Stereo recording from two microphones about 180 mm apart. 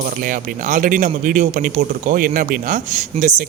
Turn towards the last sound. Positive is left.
turn(degrees=-45)  # may be behind; listen again after turning